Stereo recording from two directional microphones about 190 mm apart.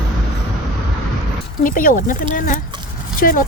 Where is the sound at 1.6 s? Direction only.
45° left (ahead or behind).